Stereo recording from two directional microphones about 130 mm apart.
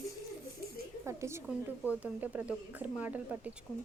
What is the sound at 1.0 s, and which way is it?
Speech, 20° right (ahead or behind).